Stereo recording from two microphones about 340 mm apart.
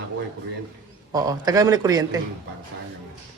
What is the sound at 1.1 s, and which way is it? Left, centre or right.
A man's voice, centre.